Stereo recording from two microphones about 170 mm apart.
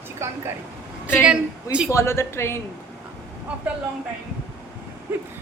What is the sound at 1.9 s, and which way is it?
Speech, 15° left (ahead or behind).